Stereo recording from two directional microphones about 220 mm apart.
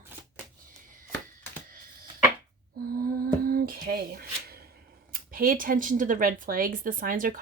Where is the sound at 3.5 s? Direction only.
40° right (ahead or behind).